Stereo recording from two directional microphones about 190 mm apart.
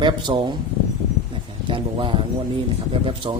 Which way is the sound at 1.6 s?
25° right (ahead or behind).